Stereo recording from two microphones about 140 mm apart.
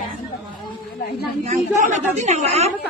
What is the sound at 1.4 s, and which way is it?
A woman's voice, 60° right (ahead or behind).